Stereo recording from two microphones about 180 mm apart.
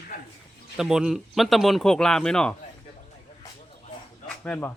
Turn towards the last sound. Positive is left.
turn(degrees=10)  # may be behind; listen again after turning